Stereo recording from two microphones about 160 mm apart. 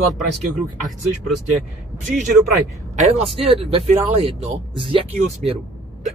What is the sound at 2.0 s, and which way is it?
Speech, 50° right (ahead or behind).